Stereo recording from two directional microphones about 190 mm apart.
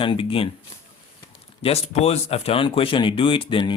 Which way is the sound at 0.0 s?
25° left (ahead or behind).